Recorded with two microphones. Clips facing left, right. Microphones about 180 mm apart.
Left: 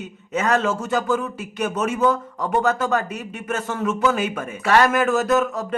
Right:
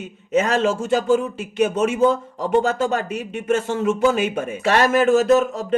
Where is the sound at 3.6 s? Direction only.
30° right (ahead or behind).